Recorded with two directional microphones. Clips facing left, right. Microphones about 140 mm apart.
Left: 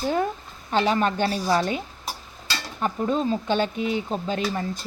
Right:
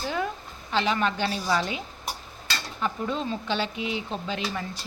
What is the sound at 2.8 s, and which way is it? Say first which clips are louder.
Speech: left 5 dB; 40° left (ahead or behind).